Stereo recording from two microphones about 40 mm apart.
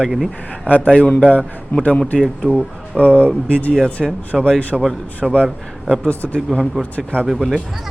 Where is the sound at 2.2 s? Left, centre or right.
Centre.